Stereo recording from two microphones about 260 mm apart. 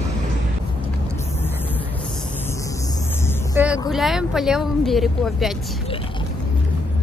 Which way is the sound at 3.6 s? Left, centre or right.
Centre.